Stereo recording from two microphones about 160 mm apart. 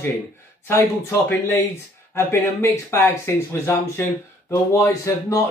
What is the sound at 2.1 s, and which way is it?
Speech, 15° left (ahead or behind).